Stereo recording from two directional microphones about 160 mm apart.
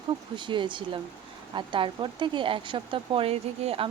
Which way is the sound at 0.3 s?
30° right (ahead or behind).